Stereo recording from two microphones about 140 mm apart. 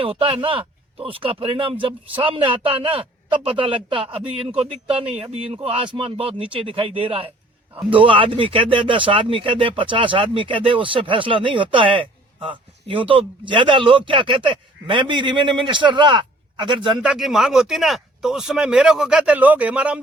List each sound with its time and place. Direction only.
0.0 s speech: 40° right (ahead or behind)
17.0 s speech: 5° right (ahead or behind)